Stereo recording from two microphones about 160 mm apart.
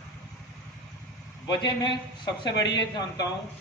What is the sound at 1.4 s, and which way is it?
A man's voice, 25° left (ahead or behind).